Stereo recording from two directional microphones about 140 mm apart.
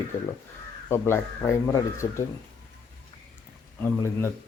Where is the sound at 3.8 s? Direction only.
15° left (ahead or behind).